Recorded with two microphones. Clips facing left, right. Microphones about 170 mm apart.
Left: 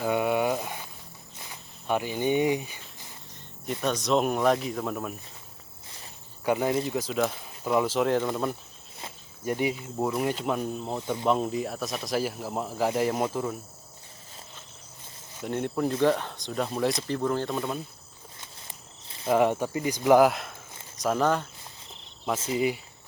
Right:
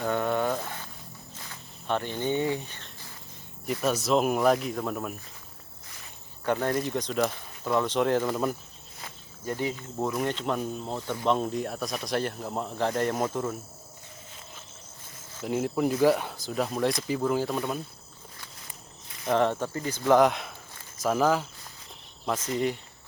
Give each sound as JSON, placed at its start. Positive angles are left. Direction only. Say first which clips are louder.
{"t": 0.0, "sound": "a sound", "louder": "left 2 dB", "side_deg": 10}
{"t": 1.4, "sound": "snake", "louder": "left 4 dB", "side_deg": 10}
{"t": 3.7, "sound": "speech", "louder": "right 1 dB", "side_deg": -5}
{"t": 6.4, "sound": "speech", "louder": "left 1 dB", "side_deg": 10}
{"t": 9.0, "sound": "speech", "louder": "left 2 dB", "side_deg": 20}
{"t": 11.3, "sound": "speech", "louder": "even", "side_deg": 0}
{"t": 15.4, "sound": "speech", "louder": "right 1 dB", "side_deg": -5}
{"t": 19.0, "sound": "cricket", "louder": "left 2 dB", "side_deg": 25}
{"t": 19.3, "sound": "speech", "louder": "left 2 dB", "side_deg": 10}
{"t": 22.4, "sound": "speech", "louder": "left 2 dB", "side_deg": 10}